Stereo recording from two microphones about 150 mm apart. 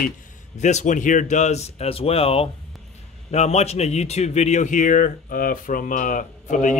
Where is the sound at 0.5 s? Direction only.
50° left (ahead or behind).